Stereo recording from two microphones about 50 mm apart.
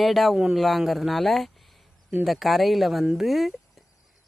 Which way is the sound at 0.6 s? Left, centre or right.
Centre.